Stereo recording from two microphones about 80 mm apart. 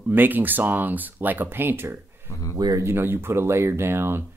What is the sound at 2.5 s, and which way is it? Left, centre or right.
Speech, right.